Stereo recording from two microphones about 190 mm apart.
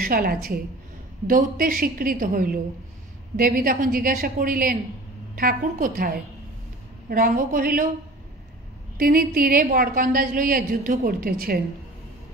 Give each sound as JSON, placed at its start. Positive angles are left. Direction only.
{"t": 0.0, "sound": "a woman's voice", "side_deg": -50}
{"t": 8.9, "sound": "a woman's voice", "side_deg": -50}